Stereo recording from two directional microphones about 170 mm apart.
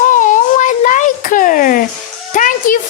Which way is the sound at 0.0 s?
50° left (ahead or behind).